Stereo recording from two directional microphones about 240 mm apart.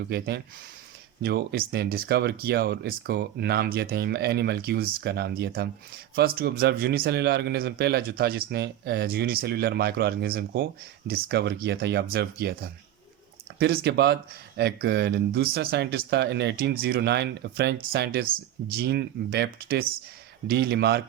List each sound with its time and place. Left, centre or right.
0.1 s speech: right
13.6 s speech: right